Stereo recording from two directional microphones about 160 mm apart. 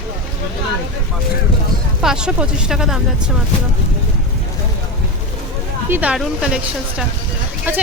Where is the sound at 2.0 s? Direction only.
5° right (ahead or behind).